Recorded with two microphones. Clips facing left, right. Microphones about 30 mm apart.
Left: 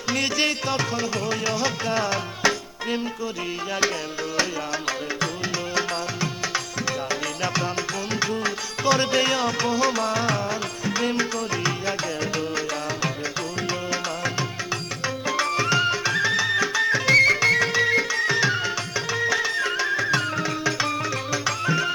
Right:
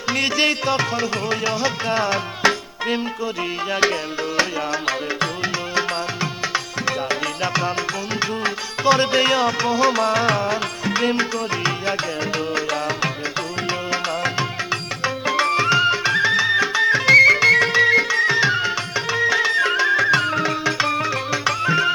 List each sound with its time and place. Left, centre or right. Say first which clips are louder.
0.1 s music: right 4 dB; centre
6.5 s music: right 4 dB; right
12.5 s tabla: right 5 dB; right
13.7 s music: right 4 dB; right